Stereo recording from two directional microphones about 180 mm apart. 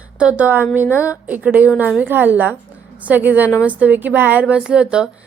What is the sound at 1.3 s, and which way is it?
A woman's voice, 10° right (ahead or behind).